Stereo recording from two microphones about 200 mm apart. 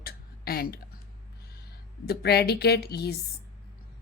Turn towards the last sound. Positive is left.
turn(degrees=55)  # may be behind; listen again after turning